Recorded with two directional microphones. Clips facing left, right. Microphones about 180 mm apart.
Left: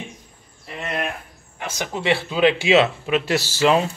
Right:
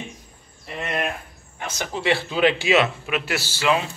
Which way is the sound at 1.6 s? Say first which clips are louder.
Left 1 dB; 10° left (ahead or behind).